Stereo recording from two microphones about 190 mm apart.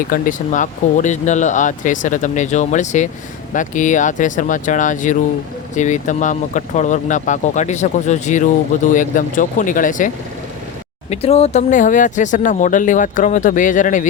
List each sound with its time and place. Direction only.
0.1 s speech: 45° left (ahead or behind)
11.1 s speech: 35° left (ahead or behind)